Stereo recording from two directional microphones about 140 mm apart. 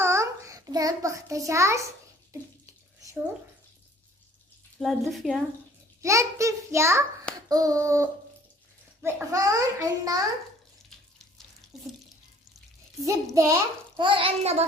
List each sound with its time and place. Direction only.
0.0 s child singing: 20° right (ahead or behind)
2.3 s bathtub: 20° right (ahead or behind)
4.8 s a woman's voice: centre (ahead or behind)
6.0 s a child's voice: 20° right (ahead or behind)
9.0 s a child's voice: 10° right (ahead or behind)
9.3 s a child's voice: 25° right (ahead or behind)
11.7 s water tap: centre (ahead or behind)
13.3 s a child's voice: 20° right (ahead or behind)
14.0 s a child's voice: 35° right (ahead or behind)